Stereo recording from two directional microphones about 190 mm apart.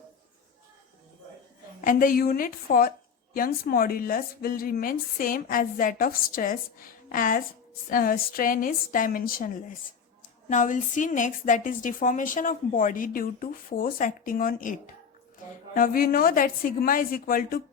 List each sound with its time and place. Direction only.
1.8 s a woman's voice: 45° left (ahead or behind)
10.5 s a woman's voice: 40° left (ahead or behind)